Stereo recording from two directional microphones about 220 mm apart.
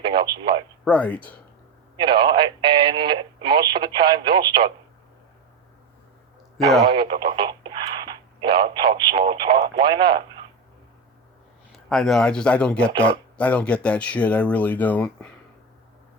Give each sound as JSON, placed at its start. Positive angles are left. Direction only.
{"t": 0.0, "sound": "speech", "side_deg": -20}
{"t": 0.9, "sound": "speech", "side_deg": 5}
{"t": 2.3, "sound": "speech", "side_deg": -20}
{"t": 6.8, "sound": "speech", "side_deg": -20}
{"t": 11.7, "sound": "speech", "side_deg": 0}